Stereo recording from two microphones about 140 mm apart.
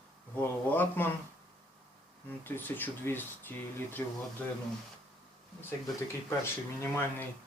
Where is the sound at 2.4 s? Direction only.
15° left (ahead or behind).